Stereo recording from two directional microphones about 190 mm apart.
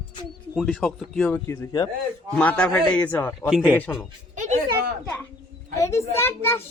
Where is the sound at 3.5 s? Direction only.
5° right (ahead or behind).